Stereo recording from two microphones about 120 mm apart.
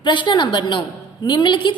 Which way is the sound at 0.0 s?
40° left (ahead or behind).